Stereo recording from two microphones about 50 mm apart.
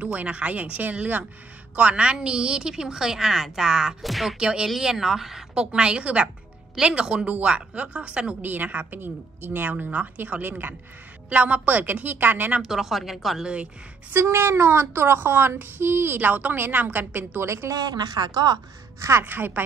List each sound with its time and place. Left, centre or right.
0.0 s a woman's voice: right; by 4.4 s centre
4.4 s a woman's voice: centre
4.6 s a woman's voice: centre
5.5 s a woman's voice: centre
7.2 s a woman's voice: right
8.4 s a woman's voice: right
12.6 s speech: centre
14.1 s a woman's voice: right
16.2 s a woman's voice: right
17.4 s speech: right
18.9 s a woman's voice: right
19.2 s a woman's voice: right